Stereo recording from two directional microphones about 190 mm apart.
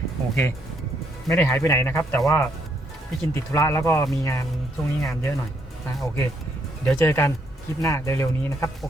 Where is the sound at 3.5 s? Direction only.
15° left (ahead or behind).